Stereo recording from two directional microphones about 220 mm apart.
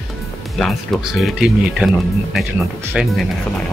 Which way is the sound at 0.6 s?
Centre (ahead or behind).